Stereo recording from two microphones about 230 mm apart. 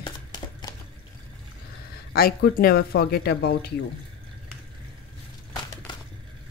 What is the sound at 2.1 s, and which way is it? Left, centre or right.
Speech, left.